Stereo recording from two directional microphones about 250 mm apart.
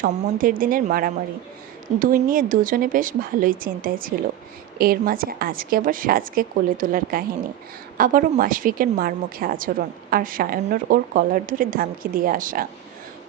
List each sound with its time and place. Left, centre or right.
0.0 s a woman's voice: right